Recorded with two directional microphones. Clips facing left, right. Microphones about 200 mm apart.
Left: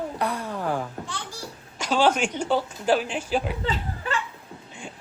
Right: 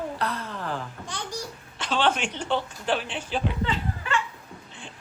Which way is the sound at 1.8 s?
10° left (ahead or behind).